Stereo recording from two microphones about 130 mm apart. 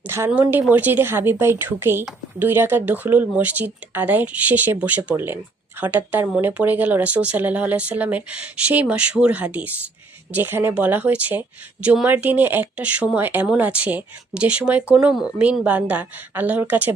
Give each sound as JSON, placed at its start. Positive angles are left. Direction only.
{"t": 0.3, "sound": "speech", "side_deg": -15}